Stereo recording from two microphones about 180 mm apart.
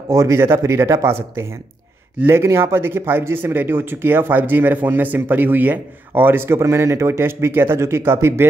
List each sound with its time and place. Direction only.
0.1 s speech: 15° right (ahead or behind)
2.1 s speech: 15° right (ahead or behind)